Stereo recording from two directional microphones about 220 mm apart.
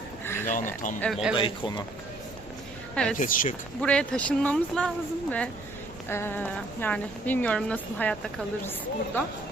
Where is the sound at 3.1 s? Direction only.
35° left (ahead or behind).